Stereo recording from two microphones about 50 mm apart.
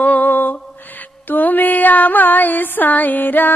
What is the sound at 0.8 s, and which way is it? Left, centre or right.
Music, left.